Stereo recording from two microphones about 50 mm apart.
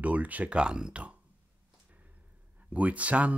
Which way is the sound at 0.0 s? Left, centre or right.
Right.